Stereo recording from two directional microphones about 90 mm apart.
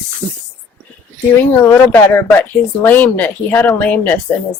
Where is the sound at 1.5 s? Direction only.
25° left (ahead or behind).